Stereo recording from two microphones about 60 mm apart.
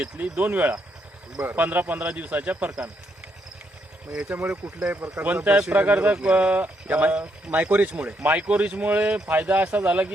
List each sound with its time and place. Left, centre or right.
0.0 s speech: right
4.3 s speech: right